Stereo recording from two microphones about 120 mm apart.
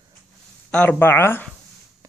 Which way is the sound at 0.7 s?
10° left (ahead or behind).